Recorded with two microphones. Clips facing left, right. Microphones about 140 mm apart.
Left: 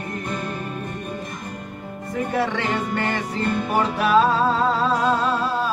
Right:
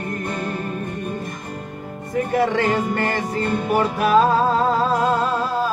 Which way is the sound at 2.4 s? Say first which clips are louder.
Right 5 dB; 40° right (ahead or behind).